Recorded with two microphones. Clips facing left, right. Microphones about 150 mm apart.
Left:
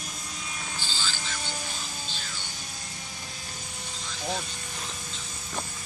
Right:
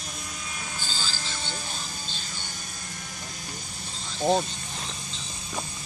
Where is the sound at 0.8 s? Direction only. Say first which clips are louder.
Even; 45° right (ahead or behind).